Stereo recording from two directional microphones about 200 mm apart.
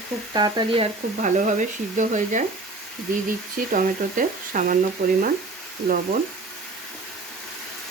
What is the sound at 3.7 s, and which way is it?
Speech, 40° right (ahead or behind).